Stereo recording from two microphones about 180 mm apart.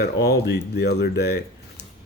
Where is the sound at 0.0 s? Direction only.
65° left (ahead or behind).